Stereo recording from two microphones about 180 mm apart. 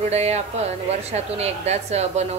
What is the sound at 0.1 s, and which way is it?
A woman's voice, 35° right (ahead or behind).